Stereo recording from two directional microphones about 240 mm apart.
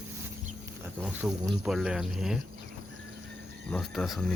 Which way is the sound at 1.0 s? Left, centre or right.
Centre.